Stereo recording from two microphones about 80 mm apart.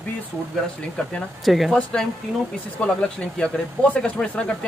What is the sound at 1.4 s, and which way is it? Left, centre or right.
Speech, centre.